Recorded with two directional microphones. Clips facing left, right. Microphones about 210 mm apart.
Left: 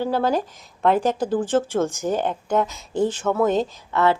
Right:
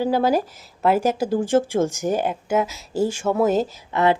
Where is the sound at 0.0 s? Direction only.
10° right (ahead or behind).